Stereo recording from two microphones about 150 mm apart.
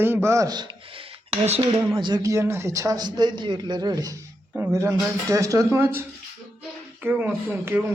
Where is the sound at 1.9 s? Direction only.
30° right (ahead or behind).